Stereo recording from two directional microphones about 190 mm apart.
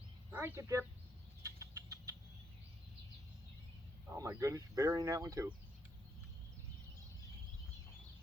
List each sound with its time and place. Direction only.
0.3 s speech: 10° right (ahead or behind)
1.4 s rodents: 15° right (ahead or behind)
4.1 s speech: 15° right (ahead or behind)